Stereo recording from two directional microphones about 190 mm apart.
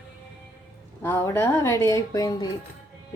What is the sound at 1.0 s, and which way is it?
Speech, 15° left (ahead or behind).